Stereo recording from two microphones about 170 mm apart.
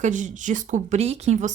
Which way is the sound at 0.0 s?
50° right (ahead or behind).